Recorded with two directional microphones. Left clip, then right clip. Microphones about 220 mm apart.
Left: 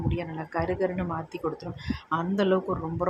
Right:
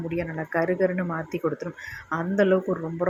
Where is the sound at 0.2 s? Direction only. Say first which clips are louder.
Right 7 dB; 10° right (ahead or behind).